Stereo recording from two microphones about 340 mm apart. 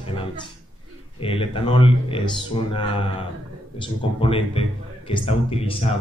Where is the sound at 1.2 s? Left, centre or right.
Centre.